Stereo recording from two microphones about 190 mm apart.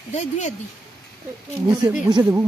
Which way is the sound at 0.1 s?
40° left (ahead or behind).